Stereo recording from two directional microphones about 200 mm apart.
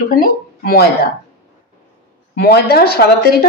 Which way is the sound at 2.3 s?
55° left (ahead or behind).